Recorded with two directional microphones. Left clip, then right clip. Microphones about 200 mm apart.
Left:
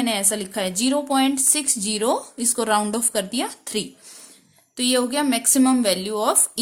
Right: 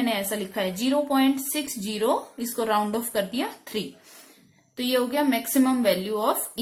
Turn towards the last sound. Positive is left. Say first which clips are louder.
# left 2 dB
turn(degrees=45)  # may be behind; listen again after turning